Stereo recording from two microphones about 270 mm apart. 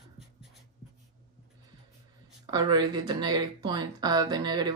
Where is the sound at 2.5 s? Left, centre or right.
Centre.